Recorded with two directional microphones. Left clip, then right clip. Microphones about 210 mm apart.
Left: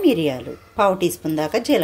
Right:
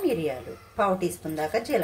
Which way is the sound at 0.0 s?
45° left (ahead or behind).